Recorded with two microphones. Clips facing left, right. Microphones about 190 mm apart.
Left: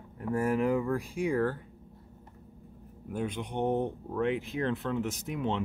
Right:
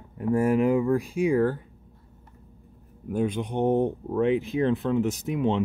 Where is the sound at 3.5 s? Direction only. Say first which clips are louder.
Right 6 dB; 30° right (ahead or behind).